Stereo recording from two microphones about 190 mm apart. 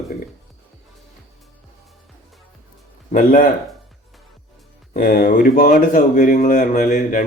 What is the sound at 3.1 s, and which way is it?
Speech, 45° left (ahead or behind).